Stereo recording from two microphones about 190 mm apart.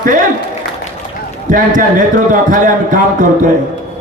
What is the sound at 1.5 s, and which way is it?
A man's voice, 45° right (ahead or behind).